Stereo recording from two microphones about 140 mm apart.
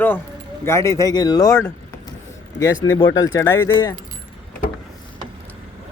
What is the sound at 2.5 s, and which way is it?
Speech, 25° left (ahead or behind).